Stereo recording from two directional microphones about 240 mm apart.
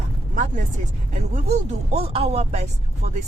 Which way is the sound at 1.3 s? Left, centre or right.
Right.